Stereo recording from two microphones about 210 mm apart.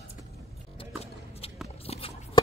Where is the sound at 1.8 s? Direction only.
30° left (ahead or behind).